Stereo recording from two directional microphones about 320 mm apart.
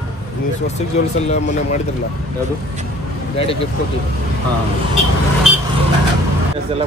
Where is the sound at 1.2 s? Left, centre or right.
Left.